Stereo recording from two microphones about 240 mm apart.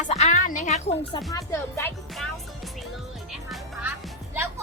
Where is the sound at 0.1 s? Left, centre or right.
Left.